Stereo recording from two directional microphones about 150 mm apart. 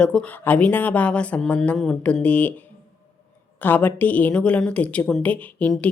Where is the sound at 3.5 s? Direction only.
10° left (ahead or behind).